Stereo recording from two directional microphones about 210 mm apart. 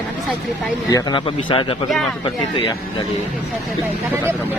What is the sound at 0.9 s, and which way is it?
Speech, 20° left (ahead or behind).